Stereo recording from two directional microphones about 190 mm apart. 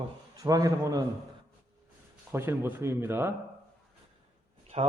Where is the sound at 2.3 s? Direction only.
10° right (ahead or behind).